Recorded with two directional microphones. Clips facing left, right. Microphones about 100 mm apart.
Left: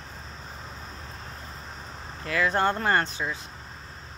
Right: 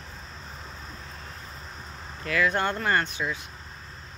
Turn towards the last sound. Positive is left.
turn(degrees=30)  # may be behind; listen again after turning